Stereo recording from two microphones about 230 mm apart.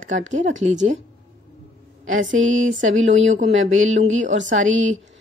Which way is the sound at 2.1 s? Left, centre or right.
Right.